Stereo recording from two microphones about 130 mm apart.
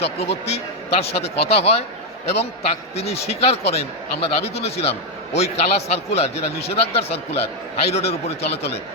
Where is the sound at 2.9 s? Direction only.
50° left (ahead or behind).